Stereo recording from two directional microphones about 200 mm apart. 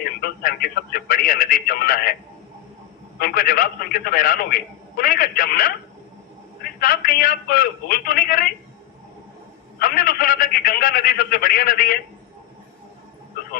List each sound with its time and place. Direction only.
0.2 s radio: 50° left (ahead or behind)
3.2 s a man's voice: 50° left (ahead or behind)
6.7 s a man's voice: 45° left (ahead or behind)
9.7 s a man's voice: 50° left (ahead or behind)